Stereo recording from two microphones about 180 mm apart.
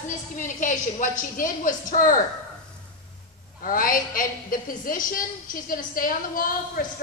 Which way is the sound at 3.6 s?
50° left (ahead or behind).